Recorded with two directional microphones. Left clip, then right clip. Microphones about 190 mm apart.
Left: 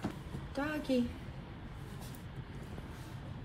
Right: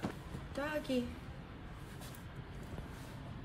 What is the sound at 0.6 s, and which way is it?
Speech, 30° left (ahead or behind).